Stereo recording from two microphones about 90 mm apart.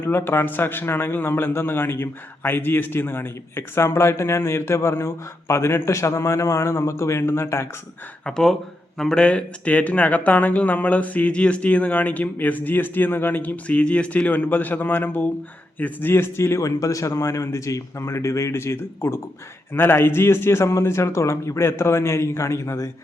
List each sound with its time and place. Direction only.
0.0 s a man's voice: 25° left (ahead or behind)
8.2 s a man's voice: 5° left (ahead or behind); by 22.9 s 35° left (ahead or behind)